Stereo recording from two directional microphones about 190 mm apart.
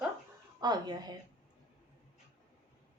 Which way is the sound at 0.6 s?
20° right (ahead or behind).